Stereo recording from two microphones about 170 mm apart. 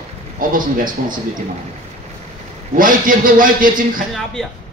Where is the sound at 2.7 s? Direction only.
55° right (ahead or behind).